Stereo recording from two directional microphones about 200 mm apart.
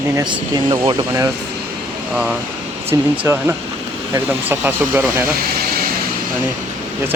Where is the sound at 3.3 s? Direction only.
15° right (ahead or behind).